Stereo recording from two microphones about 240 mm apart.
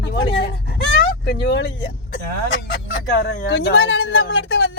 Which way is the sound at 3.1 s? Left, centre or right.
Left.